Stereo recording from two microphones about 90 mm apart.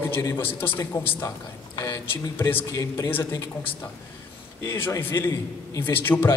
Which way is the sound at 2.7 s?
40° left (ahead or behind).